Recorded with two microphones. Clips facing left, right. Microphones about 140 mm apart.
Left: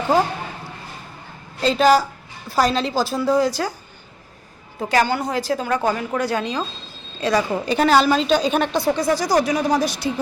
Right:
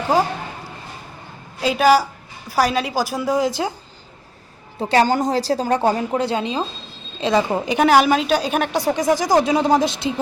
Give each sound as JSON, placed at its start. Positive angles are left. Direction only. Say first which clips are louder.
{"t": 1.6, "sound": "a woman's voice", "louder": "even", "side_deg": -10}
{"t": 4.8, "sound": "a woman's voice", "louder": "right 3 dB", "side_deg": -30}